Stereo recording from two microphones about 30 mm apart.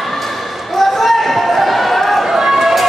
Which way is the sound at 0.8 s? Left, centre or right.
Centre.